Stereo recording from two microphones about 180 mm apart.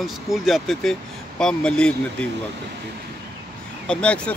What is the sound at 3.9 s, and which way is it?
Speech, 5° left (ahead or behind).